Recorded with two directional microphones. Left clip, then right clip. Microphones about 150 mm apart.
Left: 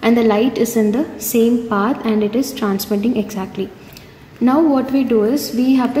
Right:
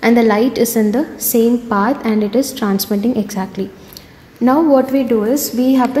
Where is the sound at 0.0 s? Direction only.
50° right (ahead or behind).